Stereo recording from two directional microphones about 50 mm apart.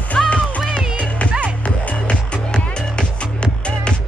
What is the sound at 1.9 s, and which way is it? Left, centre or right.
Music, left.